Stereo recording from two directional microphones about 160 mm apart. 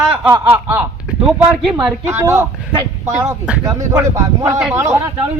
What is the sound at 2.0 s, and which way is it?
Speech, 15° right (ahead or behind).